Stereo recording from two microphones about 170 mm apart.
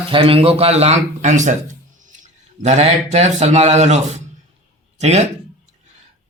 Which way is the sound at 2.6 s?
40° right (ahead or behind).